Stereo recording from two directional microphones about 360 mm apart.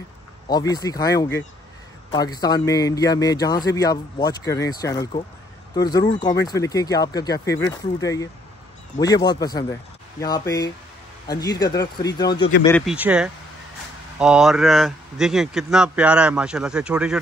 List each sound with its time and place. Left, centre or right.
0.5 s a man's voice: centre
12.4 s speech: left
12.6 s speech: centre